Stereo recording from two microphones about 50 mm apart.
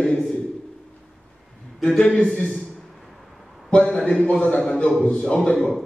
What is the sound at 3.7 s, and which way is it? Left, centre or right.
A man's voice, left.